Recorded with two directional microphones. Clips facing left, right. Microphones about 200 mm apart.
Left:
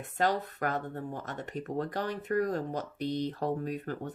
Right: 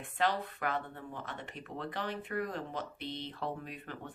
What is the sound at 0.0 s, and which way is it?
Speech, 45° left (ahead or behind).